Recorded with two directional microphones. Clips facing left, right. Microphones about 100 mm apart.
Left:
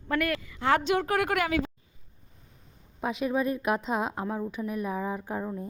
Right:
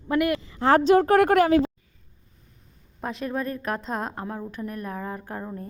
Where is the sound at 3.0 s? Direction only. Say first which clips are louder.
Left 1 dB; 5° left (ahead or behind).